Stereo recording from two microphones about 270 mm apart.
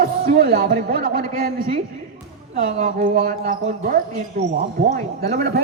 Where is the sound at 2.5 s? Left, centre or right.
Right.